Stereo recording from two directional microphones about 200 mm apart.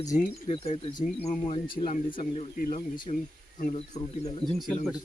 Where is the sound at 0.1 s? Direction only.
30° left (ahead or behind).